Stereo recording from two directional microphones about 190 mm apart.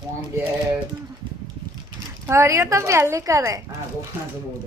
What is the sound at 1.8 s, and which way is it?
Speech, 15° right (ahead or behind).